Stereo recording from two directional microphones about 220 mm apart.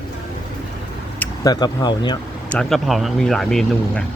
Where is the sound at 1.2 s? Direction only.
15° left (ahead or behind).